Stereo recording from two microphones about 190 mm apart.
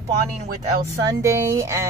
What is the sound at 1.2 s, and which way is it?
Speech, 15° right (ahead or behind).